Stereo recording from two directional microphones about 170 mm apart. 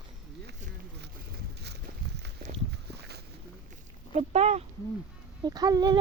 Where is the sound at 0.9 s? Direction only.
75° right (ahead or behind).